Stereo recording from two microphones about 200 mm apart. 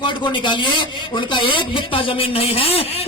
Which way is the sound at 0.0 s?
25° left (ahead or behind).